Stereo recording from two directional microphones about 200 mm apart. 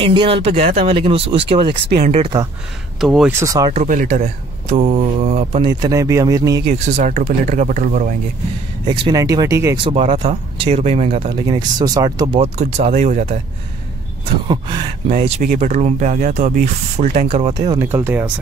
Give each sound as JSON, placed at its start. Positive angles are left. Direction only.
{"t": 0.0, "sound": "speech", "side_deg": -25}
{"t": 1.7, "sound": "speech", "side_deg": -55}
{"t": 2.0, "sound": "speech", "side_deg": -30}
{"t": 3.0, "sound": "speech", "side_deg": 0}
{"t": 3.3, "sound": "speech", "side_deg": -15}
{"t": 3.7, "sound": "speech", "side_deg": -40}
{"t": 5.8, "sound": "speech", "side_deg": -15}
{"t": 7.0, "sound": "speech", "side_deg": -40}
{"t": 8.8, "sound": "speech", "side_deg": -25}
{"t": 9.8, "sound": "speech", "side_deg": -25}
{"t": 12.4, "sound": "speech", "side_deg": -35}
{"t": 14.5, "sound": "speech", "side_deg": -20}
{"t": 15.0, "sound": "speech", "side_deg": -35}
{"t": 17.6, "sound": "speech", "side_deg": -15}